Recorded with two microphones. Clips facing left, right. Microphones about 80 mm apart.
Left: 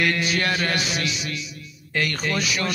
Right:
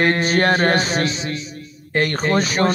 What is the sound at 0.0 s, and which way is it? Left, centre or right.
Speech, right.